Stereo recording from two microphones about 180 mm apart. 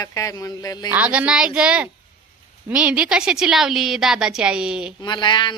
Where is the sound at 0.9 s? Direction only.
10° right (ahead or behind).